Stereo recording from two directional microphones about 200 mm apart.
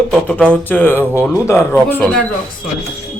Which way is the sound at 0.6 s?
10° left (ahead or behind).